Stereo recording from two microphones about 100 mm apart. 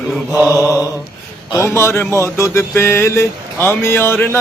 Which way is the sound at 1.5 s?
25° left (ahead or behind).